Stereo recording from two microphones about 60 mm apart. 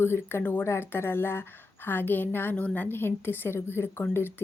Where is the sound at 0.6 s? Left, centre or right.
Left.